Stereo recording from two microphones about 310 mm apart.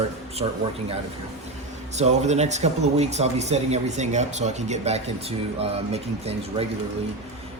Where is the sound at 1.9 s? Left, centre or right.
Right.